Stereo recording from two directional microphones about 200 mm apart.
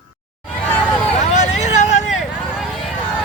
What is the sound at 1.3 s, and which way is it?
Hubbub, 35° left (ahead or behind).